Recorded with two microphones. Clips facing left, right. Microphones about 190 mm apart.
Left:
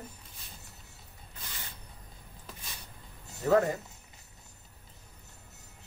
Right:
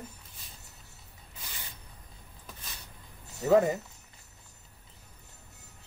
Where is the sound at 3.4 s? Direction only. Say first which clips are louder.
Right 2 dB; 15° right (ahead or behind).